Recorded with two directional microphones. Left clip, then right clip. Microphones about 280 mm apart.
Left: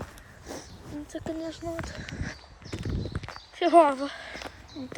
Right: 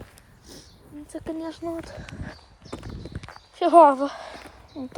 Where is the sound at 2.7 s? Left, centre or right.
Centre.